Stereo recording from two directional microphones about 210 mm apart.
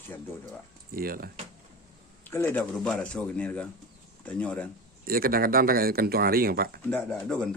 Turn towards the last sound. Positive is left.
turn(degrees=5)  # may be behind; listen again after turning